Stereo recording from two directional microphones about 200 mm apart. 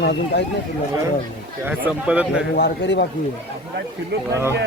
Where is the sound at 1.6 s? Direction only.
10° right (ahead or behind).